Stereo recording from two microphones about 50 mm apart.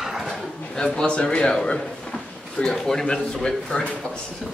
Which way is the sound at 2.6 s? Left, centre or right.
Centre.